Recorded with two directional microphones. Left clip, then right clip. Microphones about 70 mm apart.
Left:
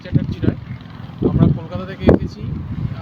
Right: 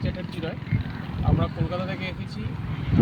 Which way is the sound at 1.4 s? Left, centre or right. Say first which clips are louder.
Left 6 dB; left.